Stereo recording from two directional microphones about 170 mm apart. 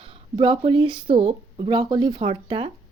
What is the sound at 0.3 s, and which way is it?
Speech, 30° right (ahead or behind).